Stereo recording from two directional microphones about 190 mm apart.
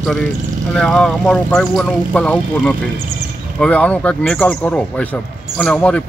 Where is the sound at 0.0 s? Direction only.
5° left (ahead or behind).